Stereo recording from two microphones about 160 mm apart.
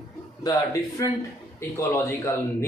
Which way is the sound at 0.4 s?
25° left (ahead or behind).